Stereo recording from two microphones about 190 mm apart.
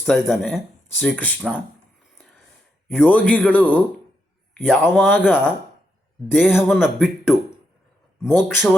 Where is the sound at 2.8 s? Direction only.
5° right (ahead or behind).